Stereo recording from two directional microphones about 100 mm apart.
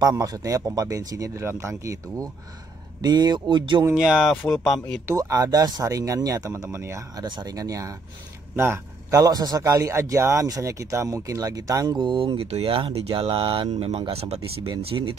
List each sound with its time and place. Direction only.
0.0 s speech: 35° right (ahead or behind)
3.0 s speech: 45° right (ahead or behind)
3.9 s speech: 5° right (ahead or behind)
5.0 s speech: 35° right (ahead or behind)
7.2 s speech: 45° right (ahead or behind)
8.5 s a man's voice: 25° right (ahead or behind)
9.2 s speech: 40° right (ahead or behind); by 14.7 s 80° right
14.8 s speech: 65° right (ahead or behind)